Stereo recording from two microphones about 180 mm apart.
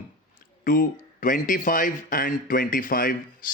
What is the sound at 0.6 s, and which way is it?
Speech, 50° left (ahead or behind).